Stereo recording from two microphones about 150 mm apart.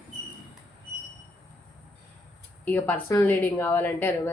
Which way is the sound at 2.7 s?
15° left (ahead or behind).